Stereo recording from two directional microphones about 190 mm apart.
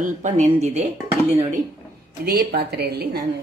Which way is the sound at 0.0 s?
40° right (ahead or behind).